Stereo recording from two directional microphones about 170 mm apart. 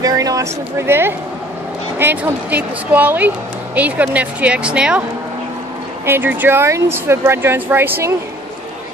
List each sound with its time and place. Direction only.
0.0 s speech: 20° right (ahead or behind)
6.0 s speech: 10° right (ahead or behind)